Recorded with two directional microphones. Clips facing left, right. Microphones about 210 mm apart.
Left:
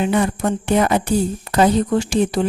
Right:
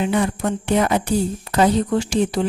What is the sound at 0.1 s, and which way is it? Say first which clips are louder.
A woman's voice: left 2 dB; 50° left (ahead or behind).